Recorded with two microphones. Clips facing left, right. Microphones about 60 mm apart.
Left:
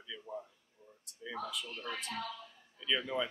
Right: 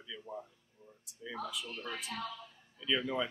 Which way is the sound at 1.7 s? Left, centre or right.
Right.